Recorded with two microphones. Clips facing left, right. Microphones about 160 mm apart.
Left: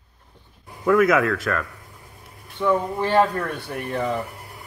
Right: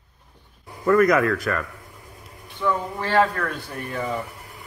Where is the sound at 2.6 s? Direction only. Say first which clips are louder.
Left 4 dB; 15° left (ahead or behind).